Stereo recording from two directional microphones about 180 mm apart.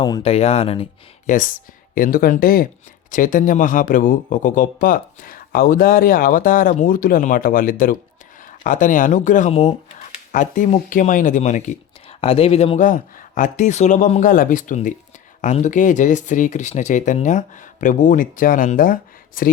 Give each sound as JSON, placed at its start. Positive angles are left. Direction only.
{"t": 0.0, "sound": "speech", "side_deg": 30}
{"t": 1.3, "sound": "speech", "side_deg": 50}